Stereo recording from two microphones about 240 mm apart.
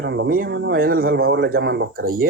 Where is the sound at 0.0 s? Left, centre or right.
Right.